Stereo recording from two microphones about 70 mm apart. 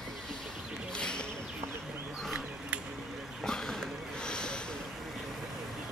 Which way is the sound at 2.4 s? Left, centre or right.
Centre.